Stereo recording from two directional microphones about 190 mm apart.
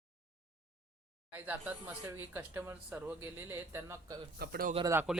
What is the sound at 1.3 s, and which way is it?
Speech, 10° right (ahead or behind).